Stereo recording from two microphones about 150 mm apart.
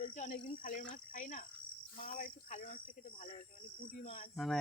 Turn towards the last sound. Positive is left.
turn(degrees=0)  # may be behind; listen again after turning